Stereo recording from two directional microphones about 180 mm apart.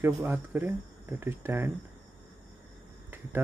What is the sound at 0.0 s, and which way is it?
Speech, 10° right (ahead or behind).